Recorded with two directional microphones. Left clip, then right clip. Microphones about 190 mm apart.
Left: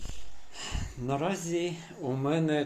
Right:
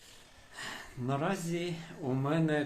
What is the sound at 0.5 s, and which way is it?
Speech, 15° left (ahead or behind).